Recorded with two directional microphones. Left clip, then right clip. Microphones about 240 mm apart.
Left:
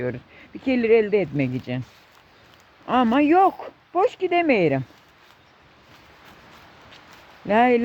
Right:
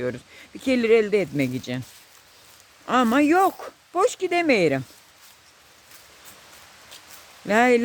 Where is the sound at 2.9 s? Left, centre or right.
Centre.